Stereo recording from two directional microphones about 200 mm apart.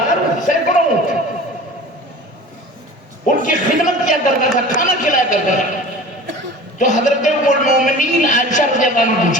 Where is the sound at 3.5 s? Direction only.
40° left (ahead or behind).